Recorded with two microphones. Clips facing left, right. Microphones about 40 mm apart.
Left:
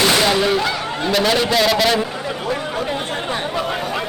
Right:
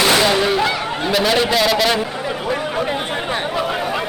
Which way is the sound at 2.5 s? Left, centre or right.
Centre.